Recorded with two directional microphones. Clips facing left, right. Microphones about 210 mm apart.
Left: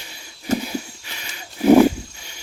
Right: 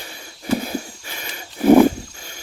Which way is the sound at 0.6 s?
50° right (ahead or behind).